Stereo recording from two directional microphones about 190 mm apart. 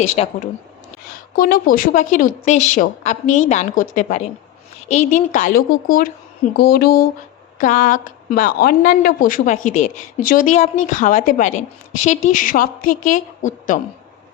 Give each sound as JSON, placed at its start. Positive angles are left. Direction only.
{"t": 0.2, "sound": "a woman's voice", "side_deg": 30}
{"t": 1.4, "sound": "a woman's voice", "side_deg": 50}